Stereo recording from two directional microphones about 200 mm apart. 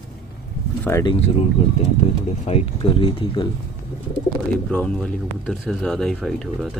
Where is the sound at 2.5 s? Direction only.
25° left (ahead or behind).